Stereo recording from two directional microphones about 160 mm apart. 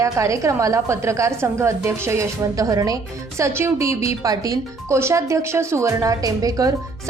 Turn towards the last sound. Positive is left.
turn(degrees=-20)  # may be behind; listen again after turning